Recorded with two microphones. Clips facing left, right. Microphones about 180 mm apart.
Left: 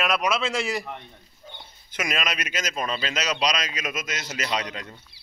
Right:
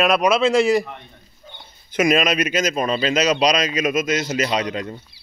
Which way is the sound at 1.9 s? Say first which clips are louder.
Right 11 dB; 20° right (ahead or behind).